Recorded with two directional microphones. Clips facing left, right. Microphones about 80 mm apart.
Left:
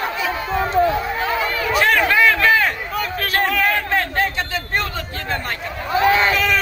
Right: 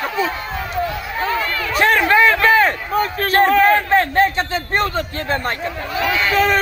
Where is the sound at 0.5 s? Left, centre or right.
Left.